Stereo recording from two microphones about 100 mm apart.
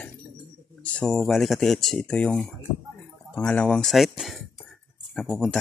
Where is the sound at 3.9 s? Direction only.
Centre (ahead or behind).